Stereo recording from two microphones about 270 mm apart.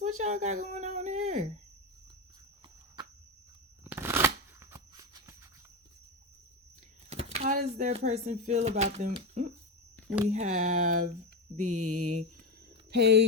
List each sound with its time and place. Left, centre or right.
0.2 s speech: right
0.7 s a sound: right
3.8 s shuffling cards: centre
7.1 s speech: right
12.9 s speech: right